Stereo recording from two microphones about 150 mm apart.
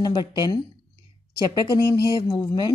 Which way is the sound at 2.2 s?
25° left (ahead or behind).